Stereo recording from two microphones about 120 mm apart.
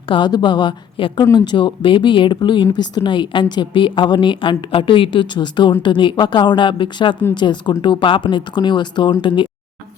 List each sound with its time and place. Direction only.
0.1 s a woman's voice: 40° left (ahead or behind)